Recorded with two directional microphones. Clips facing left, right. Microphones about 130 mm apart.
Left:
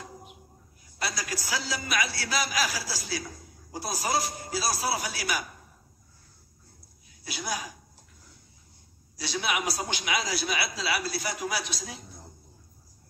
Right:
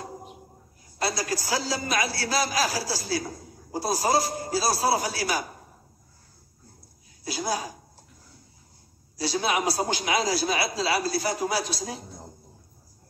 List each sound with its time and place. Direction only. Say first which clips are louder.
0.0 s a sound: right 6 dB; 40° right (ahead or behind)
0.9 s a man's voice: right 6 dB; 35° right (ahead or behind)
7.2 s a man's voice: right 5 dB; 40° right (ahead or behind)
9.2 s a man's voice: right 5 dB; 40° right (ahead or behind)